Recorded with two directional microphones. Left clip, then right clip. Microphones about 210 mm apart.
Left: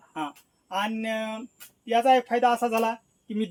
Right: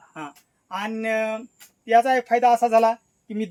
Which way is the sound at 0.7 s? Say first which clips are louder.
Right 3 dB; 10° right (ahead or behind).